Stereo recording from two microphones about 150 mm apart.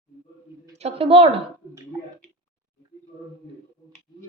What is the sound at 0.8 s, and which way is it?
Speech, 40° right (ahead or behind).